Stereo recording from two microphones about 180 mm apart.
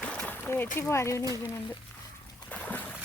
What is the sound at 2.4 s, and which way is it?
Splash, 10° left (ahead or behind).